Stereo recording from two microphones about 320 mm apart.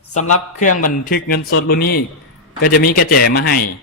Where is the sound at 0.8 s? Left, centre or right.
Left.